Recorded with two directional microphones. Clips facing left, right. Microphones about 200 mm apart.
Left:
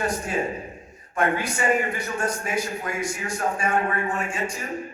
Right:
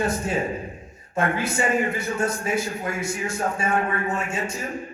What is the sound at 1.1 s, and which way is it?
A man's voice, 25° right (ahead or behind).